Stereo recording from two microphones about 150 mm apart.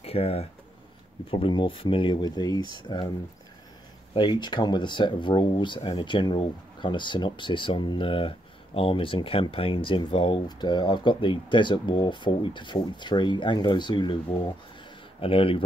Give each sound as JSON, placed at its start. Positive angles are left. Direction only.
{"t": 0.0, "sound": "speech", "side_deg": 40}
{"t": 4.1, "sound": "speech", "side_deg": 30}